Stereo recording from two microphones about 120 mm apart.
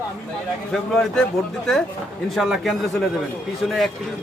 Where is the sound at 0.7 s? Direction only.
5° left (ahead or behind).